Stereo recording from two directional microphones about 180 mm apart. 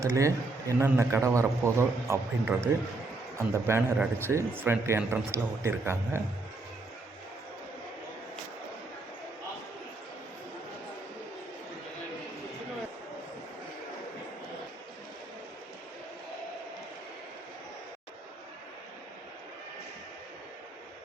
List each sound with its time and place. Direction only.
0.0 s a man's voice: 15° right (ahead or behind)